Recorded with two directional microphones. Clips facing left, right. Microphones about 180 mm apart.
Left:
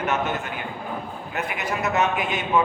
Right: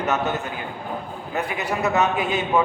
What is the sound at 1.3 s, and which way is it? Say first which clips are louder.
A man's voice: right 3 dB; 35° right (ahead or behind).